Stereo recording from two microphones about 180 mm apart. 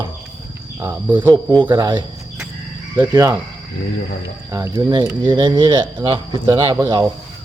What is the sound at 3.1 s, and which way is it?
Speech, 20° right (ahead or behind).